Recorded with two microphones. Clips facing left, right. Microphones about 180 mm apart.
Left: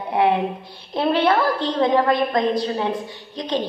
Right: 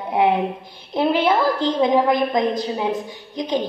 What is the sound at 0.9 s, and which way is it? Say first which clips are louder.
A woman's voice: even; 15° right (ahead or behind).